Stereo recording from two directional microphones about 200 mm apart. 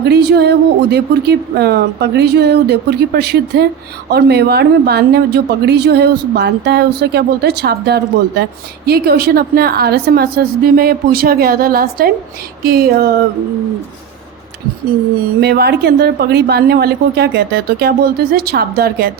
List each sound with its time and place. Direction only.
0.0 s a woman's voice: 55° right (ahead or behind)
15.4 s a woman's voice: 55° right (ahead or behind)